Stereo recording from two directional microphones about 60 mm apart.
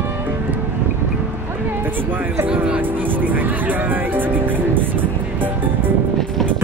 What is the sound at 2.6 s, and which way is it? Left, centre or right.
Music, right.